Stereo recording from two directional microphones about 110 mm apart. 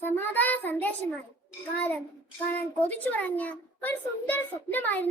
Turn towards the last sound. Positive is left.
turn(degrees=15)  # may be behind; listen again after turning